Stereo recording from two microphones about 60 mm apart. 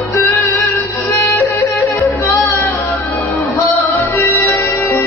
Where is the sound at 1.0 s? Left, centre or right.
Left.